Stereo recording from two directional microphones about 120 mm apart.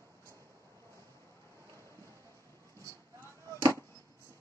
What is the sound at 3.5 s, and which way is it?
Chop, 25° right (ahead or behind).